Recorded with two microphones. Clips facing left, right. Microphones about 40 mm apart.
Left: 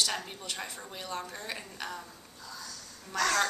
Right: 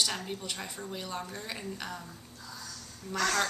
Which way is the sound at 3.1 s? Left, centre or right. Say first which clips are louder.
Left 1 dB; centre.